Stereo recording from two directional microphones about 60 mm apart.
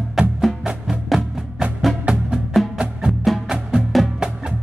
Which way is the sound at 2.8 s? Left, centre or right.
Centre.